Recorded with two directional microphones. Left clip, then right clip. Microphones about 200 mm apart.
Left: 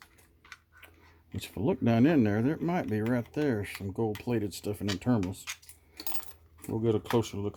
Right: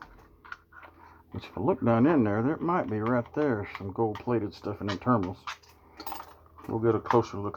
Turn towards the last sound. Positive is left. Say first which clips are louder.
# right 5 dB
turn(degrees=55)  # may be behind; listen again after turning